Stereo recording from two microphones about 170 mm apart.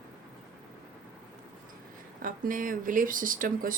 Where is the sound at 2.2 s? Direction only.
50° right (ahead or behind).